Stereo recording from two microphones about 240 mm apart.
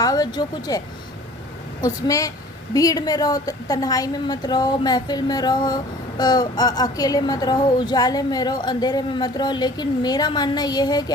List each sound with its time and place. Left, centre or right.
0.0 s a woman's voice: centre
1.8 s a woman's voice: centre